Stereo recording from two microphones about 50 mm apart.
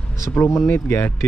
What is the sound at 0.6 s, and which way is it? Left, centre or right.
Speech, left.